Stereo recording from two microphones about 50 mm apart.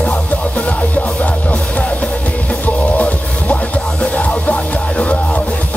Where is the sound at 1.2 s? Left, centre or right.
Left.